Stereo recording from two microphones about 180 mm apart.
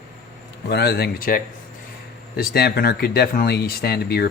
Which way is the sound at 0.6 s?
65° left (ahead or behind).